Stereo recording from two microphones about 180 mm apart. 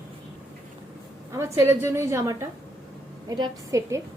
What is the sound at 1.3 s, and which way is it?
A woman's voice, 15° right (ahead or behind).